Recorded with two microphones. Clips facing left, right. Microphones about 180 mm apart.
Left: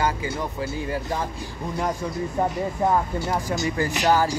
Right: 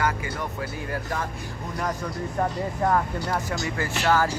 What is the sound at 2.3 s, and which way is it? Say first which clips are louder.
A man's voice: left 1 dB; 15° left (ahead or behind).